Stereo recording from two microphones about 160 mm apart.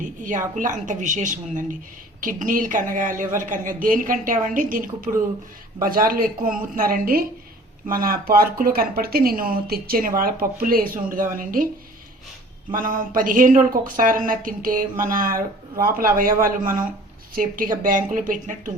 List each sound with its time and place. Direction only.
0.0 s speech: 55° right (ahead or behind)
12.7 s speech: 60° right (ahead or behind)